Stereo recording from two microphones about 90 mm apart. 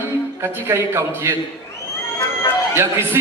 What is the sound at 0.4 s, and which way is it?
Speech, 30° right (ahead or behind).